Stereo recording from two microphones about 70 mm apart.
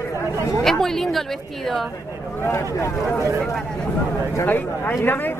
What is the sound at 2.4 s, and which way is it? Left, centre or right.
Speech, left.